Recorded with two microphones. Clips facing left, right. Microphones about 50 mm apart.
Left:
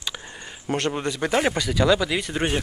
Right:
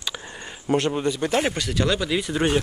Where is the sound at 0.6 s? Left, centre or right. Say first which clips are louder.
Right 3 dB; left.